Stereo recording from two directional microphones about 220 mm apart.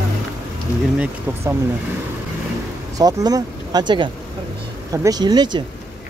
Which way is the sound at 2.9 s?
15° right (ahead or behind).